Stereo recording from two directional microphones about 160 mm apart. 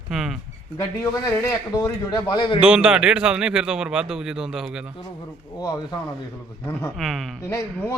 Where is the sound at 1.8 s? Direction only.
25° left (ahead or behind).